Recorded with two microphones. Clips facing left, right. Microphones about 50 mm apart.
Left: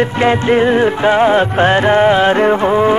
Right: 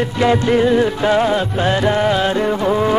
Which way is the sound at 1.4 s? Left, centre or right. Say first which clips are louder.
Left 5 dB; left.